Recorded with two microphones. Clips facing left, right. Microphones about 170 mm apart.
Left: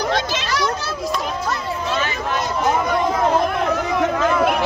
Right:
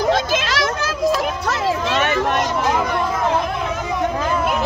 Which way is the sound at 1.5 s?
75° right (ahead or behind).